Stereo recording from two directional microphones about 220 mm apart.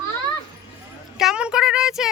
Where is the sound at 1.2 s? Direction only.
5° right (ahead or behind).